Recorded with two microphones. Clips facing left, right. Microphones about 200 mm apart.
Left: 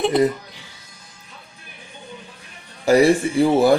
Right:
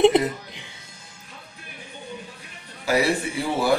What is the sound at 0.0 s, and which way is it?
Music, 20° right (ahead or behind).